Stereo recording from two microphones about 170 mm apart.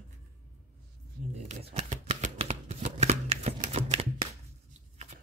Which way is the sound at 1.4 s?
40° right (ahead or behind).